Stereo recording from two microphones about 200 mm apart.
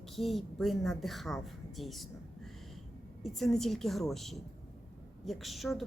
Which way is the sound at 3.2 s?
Centre (ahead or behind).